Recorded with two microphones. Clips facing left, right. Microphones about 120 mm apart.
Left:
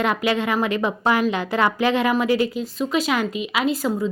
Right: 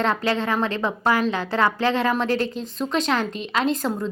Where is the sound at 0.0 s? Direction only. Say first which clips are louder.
Left 1 dB; 15° left (ahead or behind).